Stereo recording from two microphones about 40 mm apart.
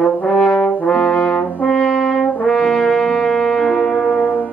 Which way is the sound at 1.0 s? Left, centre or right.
Centre.